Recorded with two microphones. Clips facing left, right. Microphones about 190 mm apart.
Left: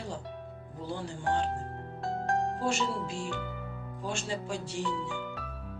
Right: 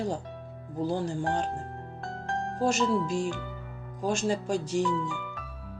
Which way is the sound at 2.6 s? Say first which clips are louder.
Right 5 dB; 40° right (ahead or behind).